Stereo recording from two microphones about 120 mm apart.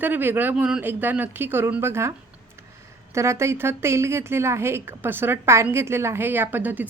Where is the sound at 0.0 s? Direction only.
15° right (ahead or behind).